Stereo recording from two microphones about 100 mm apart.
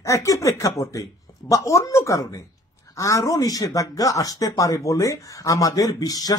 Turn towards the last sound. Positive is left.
turn(degrees=40)  # may be behind; listen again after turning